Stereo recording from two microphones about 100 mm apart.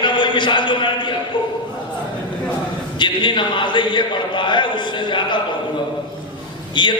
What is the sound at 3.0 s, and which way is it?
A man's voice, 50° left (ahead or behind).